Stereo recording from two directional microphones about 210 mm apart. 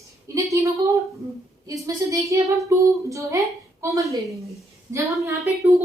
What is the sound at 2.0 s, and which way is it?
A woman's voice, 15° right (ahead or behind).